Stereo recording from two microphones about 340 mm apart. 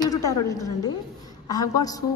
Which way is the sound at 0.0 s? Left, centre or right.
Centre.